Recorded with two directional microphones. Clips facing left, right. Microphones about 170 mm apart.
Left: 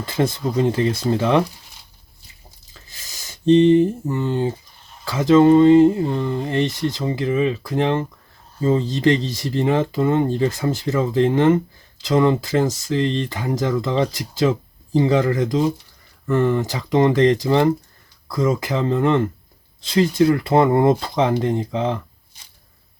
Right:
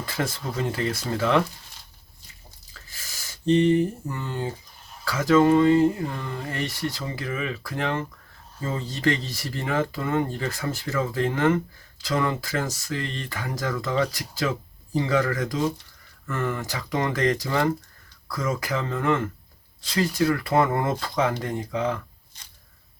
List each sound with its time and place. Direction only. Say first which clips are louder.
0.0 s speech: left 8 dB; 25° left (ahead or behind)
2.7 s a sound: left 1 dB; 20° left (ahead or behind)
4.1 s speech: left 9 dB; 25° left (ahead or behind)